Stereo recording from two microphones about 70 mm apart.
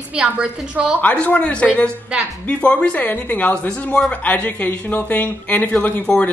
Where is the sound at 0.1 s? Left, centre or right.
Centre.